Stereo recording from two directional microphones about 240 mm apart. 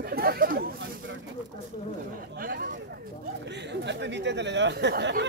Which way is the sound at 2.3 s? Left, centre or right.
Right.